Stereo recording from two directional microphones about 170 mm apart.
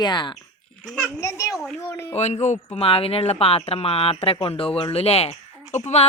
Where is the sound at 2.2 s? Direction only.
40° left (ahead or behind).